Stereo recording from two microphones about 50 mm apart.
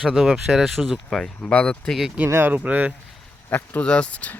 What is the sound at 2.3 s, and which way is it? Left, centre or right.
Speech, right.